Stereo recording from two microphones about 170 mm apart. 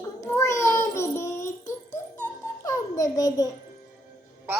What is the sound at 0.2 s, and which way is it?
Child singing, 15° left (ahead or behind).